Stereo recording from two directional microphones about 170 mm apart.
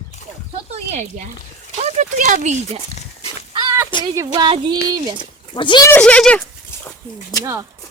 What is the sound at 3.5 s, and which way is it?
Chicken, 20° right (ahead or behind).